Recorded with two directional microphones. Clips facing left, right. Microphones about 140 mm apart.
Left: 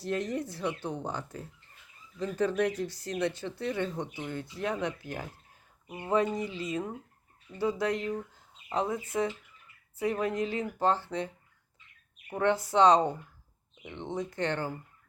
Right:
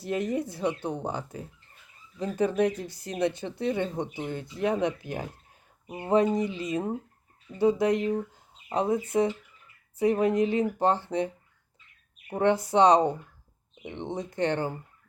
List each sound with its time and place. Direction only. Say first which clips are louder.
0.0 s speech: right 3 dB; 10° right (ahead or behind)
12.3 s speech: right 4 dB; 20° right (ahead or behind)